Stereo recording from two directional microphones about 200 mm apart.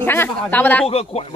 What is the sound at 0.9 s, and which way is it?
Speech, 30° left (ahead or behind).